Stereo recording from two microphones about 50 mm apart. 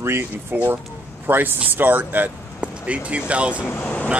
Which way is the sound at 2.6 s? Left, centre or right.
Right.